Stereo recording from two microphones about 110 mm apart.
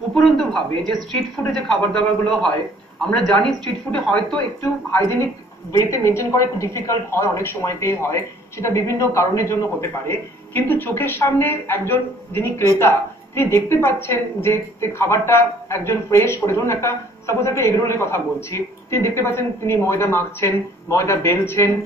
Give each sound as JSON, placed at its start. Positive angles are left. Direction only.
{"t": 0.1, "sound": "a man's voice", "side_deg": 5}
{"t": 4.9, "sound": "a woman's voice", "side_deg": 20}